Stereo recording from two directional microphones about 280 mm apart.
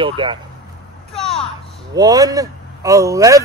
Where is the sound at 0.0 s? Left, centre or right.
Centre.